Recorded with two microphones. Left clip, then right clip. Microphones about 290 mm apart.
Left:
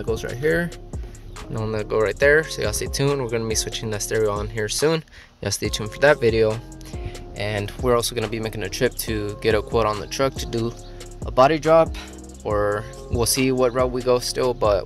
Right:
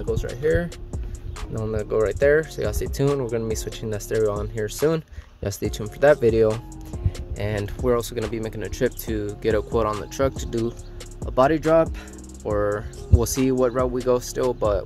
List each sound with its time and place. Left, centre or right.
0.0 s speech: centre
1.5 s speech: centre
7.6 s speech: centre